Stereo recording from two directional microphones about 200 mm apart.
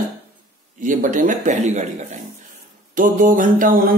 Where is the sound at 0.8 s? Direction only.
40° right (ahead or behind).